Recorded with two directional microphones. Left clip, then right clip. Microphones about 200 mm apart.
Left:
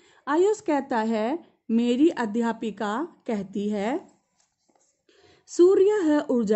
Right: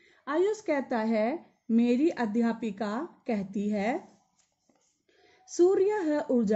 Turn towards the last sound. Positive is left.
turn(degrees=55)  # may be behind; listen again after turning